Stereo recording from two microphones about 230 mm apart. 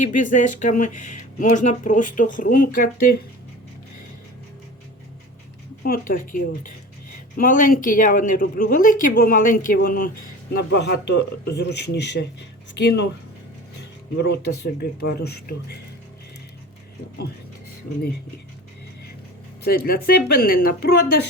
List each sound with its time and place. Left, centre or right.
0.0 s speech: left
5.8 s speech: left
12.8 s speech: left
14.2 s speech: left
19.6 s speech: left